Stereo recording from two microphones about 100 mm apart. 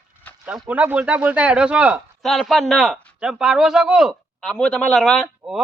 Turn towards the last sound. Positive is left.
turn(degrees=-5)  # may be behind; listen again after turning